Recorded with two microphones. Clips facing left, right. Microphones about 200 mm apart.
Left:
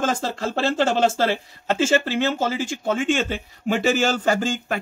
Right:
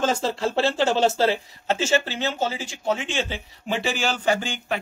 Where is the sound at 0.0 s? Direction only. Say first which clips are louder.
Right 1 dB; 50° left (ahead or behind).